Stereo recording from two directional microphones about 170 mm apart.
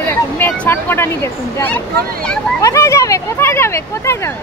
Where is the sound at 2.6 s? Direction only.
20° left (ahead or behind).